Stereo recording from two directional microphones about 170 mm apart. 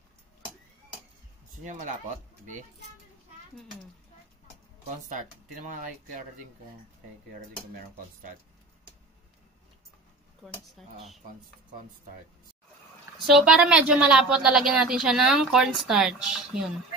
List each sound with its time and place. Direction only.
1.6 s speech: 45° right (ahead or behind)
4.8 s speech: 45° right (ahead or behind)
10.8 s a woman's voice: centre (ahead or behind)
13.3 s a woman's voice: 5° right (ahead or behind)